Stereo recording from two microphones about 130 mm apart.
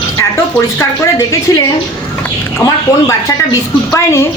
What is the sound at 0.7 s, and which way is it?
Speech, 30° left (ahead or behind).